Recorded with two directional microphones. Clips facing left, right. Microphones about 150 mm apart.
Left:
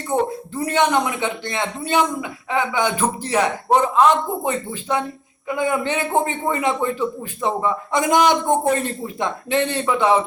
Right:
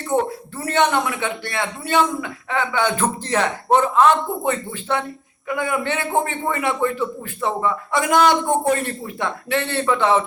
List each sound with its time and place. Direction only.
0.5 s a man's voice: 15° left (ahead or behind)